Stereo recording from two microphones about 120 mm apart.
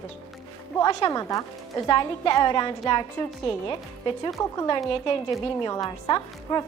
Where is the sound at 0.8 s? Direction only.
35° left (ahead or behind).